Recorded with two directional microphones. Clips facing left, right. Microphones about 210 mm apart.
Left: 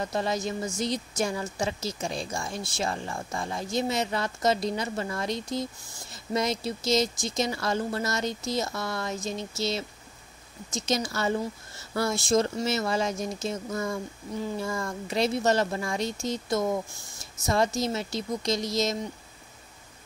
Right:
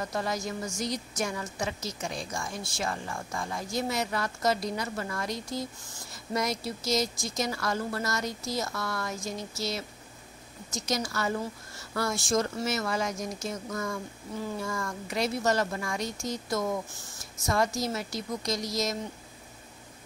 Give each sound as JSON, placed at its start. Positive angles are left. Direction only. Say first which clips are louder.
{"t": 0.0, "sound": "speech", "louder": "left 3 dB", "side_deg": 25}